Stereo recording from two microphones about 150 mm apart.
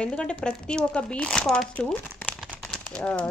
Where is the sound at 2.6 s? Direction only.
5° left (ahead or behind).